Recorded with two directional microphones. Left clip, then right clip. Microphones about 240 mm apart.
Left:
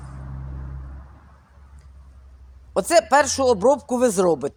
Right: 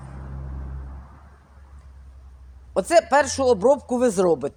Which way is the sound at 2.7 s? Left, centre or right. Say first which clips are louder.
Left 1 dB; centre.